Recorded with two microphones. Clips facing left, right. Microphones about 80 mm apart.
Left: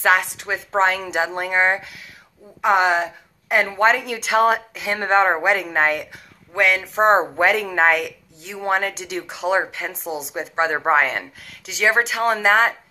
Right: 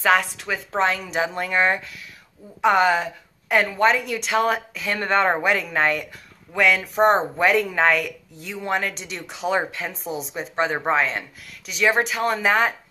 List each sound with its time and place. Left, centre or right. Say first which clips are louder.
0.0 s a woman's voice: left 1 dB; left
6.5 s speech: even; centre
6.8 s a woman's voice: left 3 dB; left
7.3 s a woman's voice: left 1 dB; left
11.7 s a woman's voice: left 1 dB; left